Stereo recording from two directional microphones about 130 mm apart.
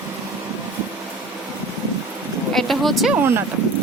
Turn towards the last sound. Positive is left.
turn(degrees=-15)  # may be behind; listen again after turning